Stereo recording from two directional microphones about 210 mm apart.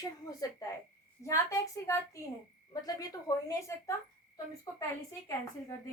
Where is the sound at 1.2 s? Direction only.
15° left (ahead or behind).